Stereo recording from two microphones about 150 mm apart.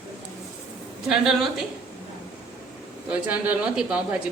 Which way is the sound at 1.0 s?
Centre (ahead or behind).